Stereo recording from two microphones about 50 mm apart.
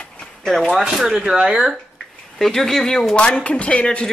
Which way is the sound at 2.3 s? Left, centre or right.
Centre.